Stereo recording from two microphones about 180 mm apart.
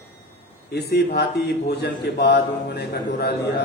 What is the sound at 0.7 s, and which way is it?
A man's voice, 65° left (ahead or behind).